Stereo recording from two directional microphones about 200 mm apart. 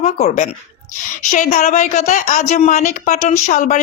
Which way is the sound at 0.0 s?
35° left (ahead or behind).